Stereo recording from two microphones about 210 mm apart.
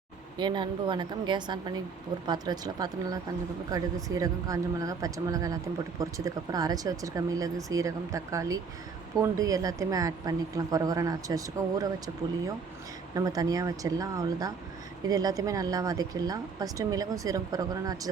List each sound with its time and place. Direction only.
0.3 s a woman's voice: 20° right (ahead or behind)
13.1 s speech: 15° right (ahead or behind)